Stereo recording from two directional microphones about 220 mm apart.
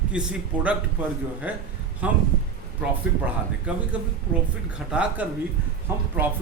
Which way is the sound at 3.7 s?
5° right (ahead or behind).